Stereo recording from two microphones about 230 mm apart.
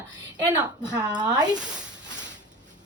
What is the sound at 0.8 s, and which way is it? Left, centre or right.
Speech, centre.